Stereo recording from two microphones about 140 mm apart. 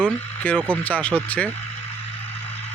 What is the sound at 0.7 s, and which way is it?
Speech, 10° left (ahead or behind).